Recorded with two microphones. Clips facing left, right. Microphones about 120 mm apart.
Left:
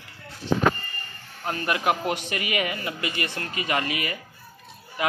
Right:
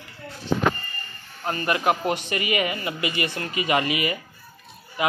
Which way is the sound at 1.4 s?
Centre (ahead or behind).